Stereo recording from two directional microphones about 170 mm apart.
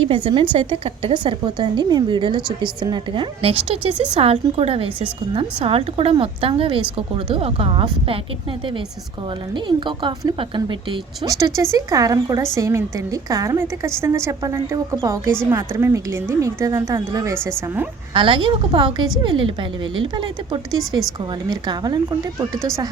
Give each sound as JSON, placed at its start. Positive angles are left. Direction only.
{"t": 0.1, "sound": "a woman's voice", "side_deg": -30}
{"t": 9.6, "sound": "a woman's voice", "side_deg": -30}
{"t": 11.3, "sound": "a woman's voice", "side_deg": -20}
{"t": 18.1, "sound": "a woman's voice", "side_deg": -30}
{"t": 22.5, "sound": "speech", "side_deg": 5}